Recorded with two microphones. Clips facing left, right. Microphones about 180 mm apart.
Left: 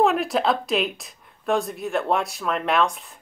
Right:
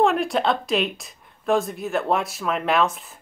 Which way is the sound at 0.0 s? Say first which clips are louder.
Even; centre (ahead or behind).